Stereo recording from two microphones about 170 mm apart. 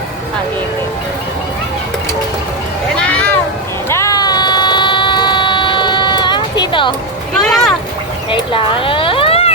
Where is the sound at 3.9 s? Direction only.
20° left (ahead or behind).